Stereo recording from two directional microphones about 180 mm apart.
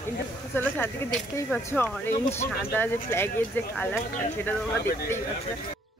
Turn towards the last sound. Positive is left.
turn(degrees=15)  # may be behind; listen again after turning